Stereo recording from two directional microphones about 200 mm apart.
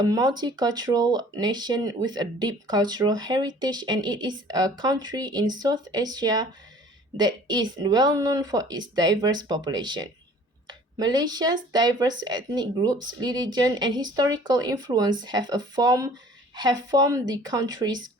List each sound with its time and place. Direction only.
0.0 s speech: 20° right (ahead or behind)